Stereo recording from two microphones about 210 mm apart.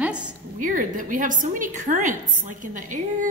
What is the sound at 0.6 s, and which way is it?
A woman's voice, 40° right (ahead or behind).